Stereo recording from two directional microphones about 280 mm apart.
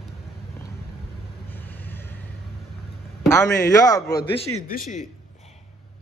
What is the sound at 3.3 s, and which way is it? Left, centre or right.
Speech, centre.